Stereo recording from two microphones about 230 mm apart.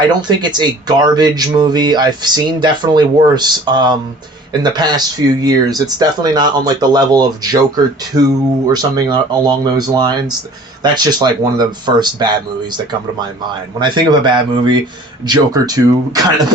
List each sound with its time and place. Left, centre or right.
0.1 s speech: centre